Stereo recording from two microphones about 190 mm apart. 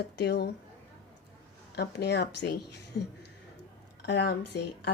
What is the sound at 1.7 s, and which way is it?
A woman's voice, 60° left (ahead or behind).